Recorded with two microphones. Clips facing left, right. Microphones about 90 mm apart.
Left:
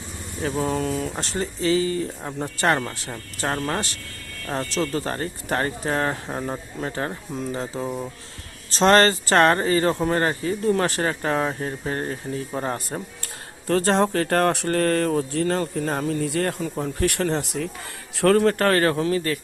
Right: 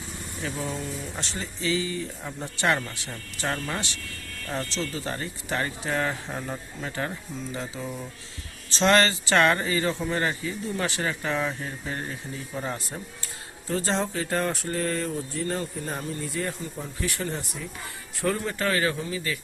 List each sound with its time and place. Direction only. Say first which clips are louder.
0.4 s speech: left 8 dB; 45° left (ahead or behind)
0.7 s speech: left 9 dB; 85° left
1.2 s speech: left 6 dB; 45° left (ahead or behind)
13.7 s speech: left 7 dB; 65° left (ahead or behind)